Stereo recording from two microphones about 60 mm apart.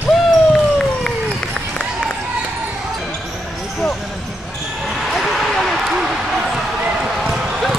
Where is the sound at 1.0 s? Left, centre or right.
Centre.